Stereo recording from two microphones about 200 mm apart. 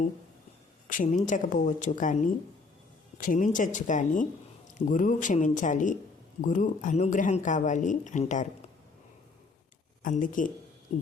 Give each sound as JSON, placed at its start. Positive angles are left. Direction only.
{"t": 0.9, "sound": "speech", "side_deg": 40}
{"t": 10.0, "sound": "speech", "side_deg": 40}